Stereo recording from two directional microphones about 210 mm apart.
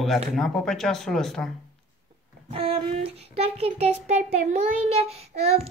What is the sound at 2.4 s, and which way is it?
Child singing, 25° right (ahead or behind).